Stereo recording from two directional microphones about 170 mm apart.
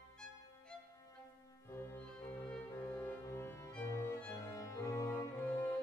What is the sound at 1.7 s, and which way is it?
Music, 15° left (ahead or behind).